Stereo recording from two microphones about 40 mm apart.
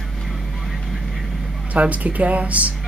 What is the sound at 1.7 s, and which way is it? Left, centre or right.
Speech, right.